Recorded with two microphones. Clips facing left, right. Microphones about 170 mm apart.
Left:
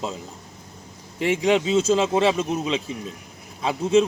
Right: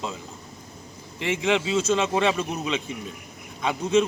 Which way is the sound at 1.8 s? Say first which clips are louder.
Left 3 dB; 35° left (ahead or behind).